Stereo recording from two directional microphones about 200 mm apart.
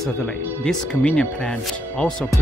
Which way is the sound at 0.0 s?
5° left (ahead or behind).